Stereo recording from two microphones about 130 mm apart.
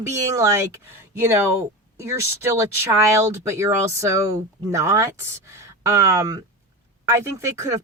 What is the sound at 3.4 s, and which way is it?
Speech, 25° right (ahead or behind).